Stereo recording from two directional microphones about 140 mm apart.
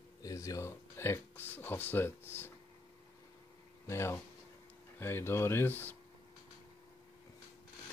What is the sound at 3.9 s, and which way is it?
Speech, 20° left (ahead or behind).